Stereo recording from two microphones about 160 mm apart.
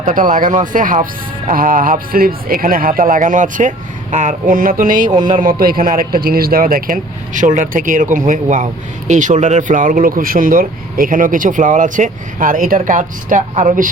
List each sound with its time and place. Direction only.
0.1 s speech: 55° right (ahead or behind)